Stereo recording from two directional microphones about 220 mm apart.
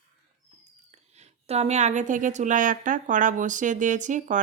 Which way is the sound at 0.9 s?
30° right (ahead or behind).